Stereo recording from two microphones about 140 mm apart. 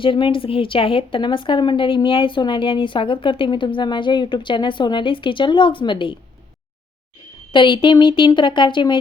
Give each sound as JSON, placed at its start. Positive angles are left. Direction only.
{"t": 0.0, "sound": "a woman's voice", "side_deg": 35}
{"t": 7.5, "sound": "a woman's voice", "side_deg": 35}